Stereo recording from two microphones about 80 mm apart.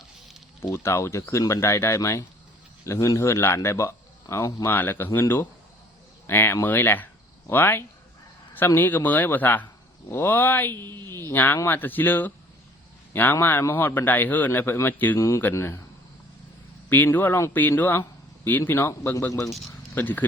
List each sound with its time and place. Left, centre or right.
0.6 s speech: left
4.7 s speech: left
6.2 s speech: left
13.3 s speech: left
15.5 s speech: left
16.9 s speech: left